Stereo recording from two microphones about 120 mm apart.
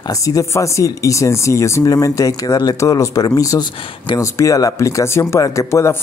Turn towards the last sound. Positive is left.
turn(degrees=25)  # may be behind; listen again after turning